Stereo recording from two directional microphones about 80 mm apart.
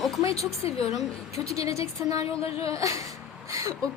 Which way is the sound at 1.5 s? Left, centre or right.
Right.